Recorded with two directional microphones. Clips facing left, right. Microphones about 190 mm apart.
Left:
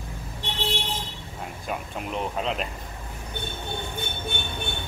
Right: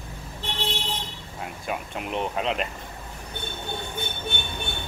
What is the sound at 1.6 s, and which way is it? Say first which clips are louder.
Speech: right 1 dB; centre (ahead or behind).